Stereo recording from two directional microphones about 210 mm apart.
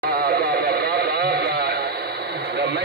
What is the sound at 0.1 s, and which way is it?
Radio, 50° right (ahead or behind).